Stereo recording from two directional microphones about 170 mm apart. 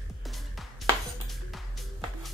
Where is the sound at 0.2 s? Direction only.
Centre (ahead or behind).